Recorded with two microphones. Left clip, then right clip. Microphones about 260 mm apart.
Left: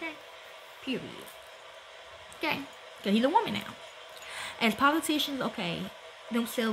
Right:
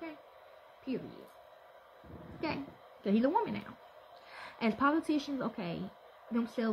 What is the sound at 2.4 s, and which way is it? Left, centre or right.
Speech, centre.